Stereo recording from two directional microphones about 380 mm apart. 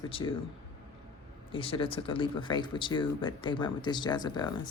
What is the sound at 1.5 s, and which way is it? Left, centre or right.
Speech, centre.